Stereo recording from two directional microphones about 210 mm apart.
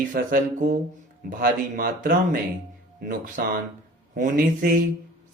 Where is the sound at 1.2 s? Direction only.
45° right (ahead or behind).